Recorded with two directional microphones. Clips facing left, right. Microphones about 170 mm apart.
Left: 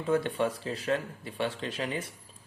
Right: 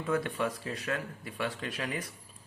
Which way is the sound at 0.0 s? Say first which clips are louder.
Left 3 dB; 30° left (ahead or behind).